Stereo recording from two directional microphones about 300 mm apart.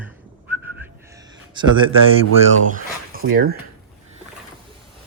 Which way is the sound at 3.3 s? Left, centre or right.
Right.